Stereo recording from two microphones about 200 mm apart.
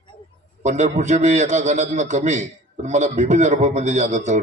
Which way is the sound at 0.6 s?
35° right (ahead or behind).